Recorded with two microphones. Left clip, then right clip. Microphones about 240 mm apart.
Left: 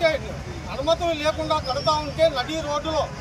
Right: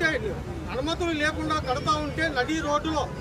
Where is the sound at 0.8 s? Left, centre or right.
Centre.